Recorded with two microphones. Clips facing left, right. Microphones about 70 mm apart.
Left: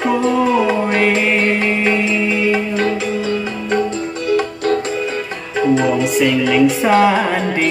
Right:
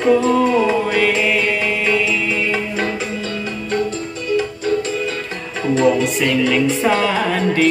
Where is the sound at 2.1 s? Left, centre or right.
Centre.